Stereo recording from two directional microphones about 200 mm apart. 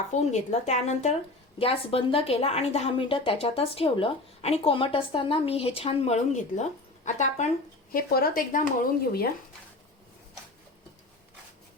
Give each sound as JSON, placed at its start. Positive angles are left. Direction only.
{"t": 0.1, "sound": "a woman's voice", "side_deg": 35}
{"t": 7.9, "sound": "speech", "side_deg": 45}